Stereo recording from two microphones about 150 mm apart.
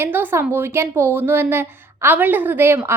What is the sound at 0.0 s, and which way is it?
A woman's voice, 15° right (ahead or behind).